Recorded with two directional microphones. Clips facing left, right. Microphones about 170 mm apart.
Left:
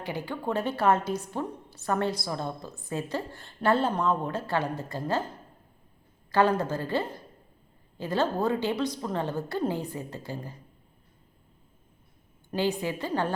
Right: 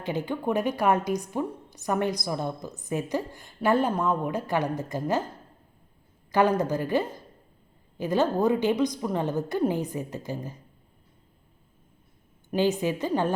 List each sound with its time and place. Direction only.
0.0 s a woman's voice: 20° right (ahead or behind)
6.3 s a woman's voice: 15° right (ahead or behind)
12.5 s a woman's voice: 20° right (ahead or behind)